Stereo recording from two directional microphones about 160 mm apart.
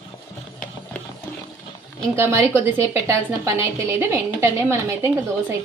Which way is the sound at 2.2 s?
20° right (ahead or behind).